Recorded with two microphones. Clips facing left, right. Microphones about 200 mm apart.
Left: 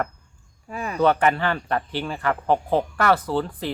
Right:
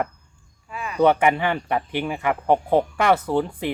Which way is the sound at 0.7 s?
40° left (ahead or behind).